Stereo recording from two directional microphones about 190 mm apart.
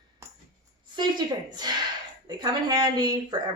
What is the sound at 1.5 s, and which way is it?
A man's voice, 20° right (ahead or behind).